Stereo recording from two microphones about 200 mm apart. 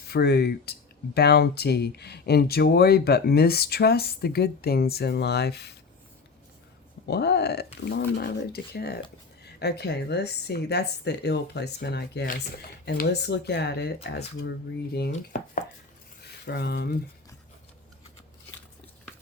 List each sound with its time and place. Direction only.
0.1 s speech: 55° left (ahead or behind)
7.1 s speech: 55° left (ahead or behind)